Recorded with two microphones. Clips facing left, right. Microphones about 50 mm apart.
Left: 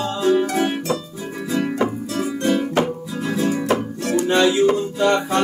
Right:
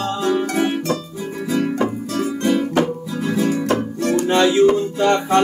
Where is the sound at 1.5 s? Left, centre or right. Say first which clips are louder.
Right 1 dB; centre.